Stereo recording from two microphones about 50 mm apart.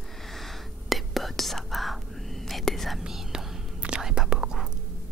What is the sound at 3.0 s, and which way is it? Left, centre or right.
Whispering, centre.